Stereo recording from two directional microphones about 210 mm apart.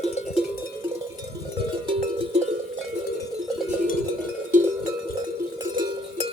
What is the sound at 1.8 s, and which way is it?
Music, 30° right (ahead or behind).